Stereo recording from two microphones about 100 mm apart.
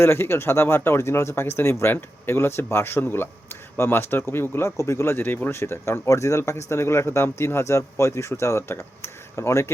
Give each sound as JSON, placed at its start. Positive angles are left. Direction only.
{"t": 0.0, "sound": "speech", "side_deg": 25}